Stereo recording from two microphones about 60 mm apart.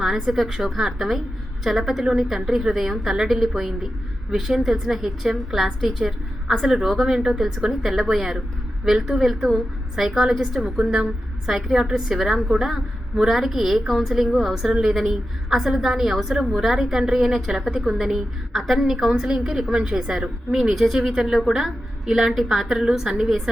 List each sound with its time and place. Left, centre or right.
0.0 s a woman's voice: centre